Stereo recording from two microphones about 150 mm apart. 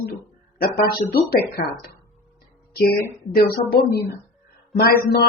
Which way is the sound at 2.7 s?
90° left.